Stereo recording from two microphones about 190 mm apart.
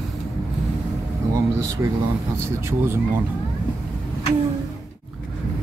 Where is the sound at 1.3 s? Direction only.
15° right (ahead or behind).